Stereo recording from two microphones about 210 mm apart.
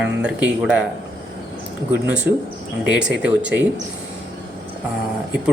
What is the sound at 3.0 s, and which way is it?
Speech, 55° right (ahead or behind).